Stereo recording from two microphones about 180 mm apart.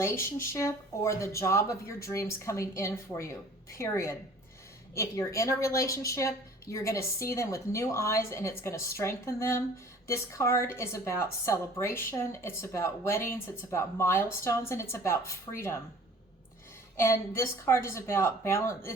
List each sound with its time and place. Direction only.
0.0 s a woman's voice: 15° left (ahead or behind)
17.0 s a woman's voice: 15° left (ahead or behind)